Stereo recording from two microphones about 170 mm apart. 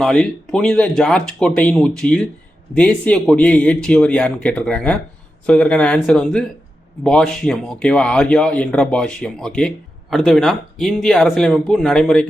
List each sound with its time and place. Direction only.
0.0 s speech: 5° left (ahead or behind)